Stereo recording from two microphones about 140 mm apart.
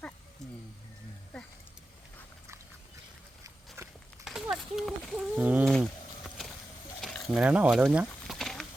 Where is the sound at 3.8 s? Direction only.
20° right (ahead or behind).